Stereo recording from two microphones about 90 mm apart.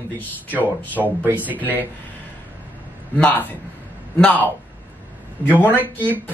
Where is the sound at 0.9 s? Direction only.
20° right (ahead or behind).